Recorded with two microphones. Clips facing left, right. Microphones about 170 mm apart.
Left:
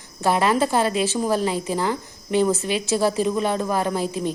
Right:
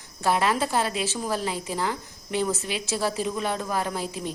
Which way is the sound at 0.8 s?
45° left (ahead or behind).